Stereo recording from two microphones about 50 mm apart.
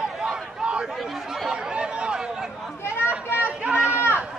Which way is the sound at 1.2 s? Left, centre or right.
Centre.